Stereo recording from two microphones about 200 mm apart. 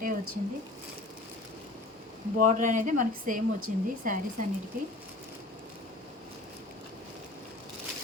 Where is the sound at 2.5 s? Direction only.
40° right (ahead or behind).